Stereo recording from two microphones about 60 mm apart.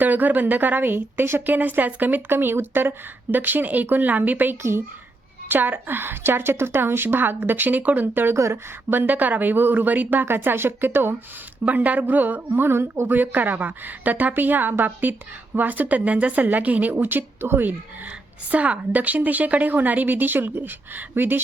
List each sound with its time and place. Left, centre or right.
0.0 s a woman's voice: right
11.6 s a woman's voice: right
12.5 s speech: right
13.1 s a woman's voice: right